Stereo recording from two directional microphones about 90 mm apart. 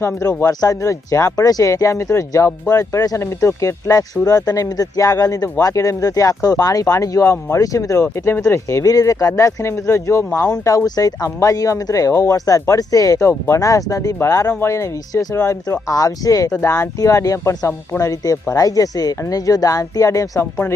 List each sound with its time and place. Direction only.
0.6 s speech: 35° left (ahead or behind)
15.4 s speech: 30° left (ahead or behind)
20.4 s speech: 25° left (ahead or behind)